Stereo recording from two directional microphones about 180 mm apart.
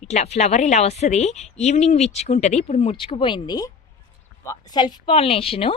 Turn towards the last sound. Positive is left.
turn(degrees=30)  # may be behind; listen again after turning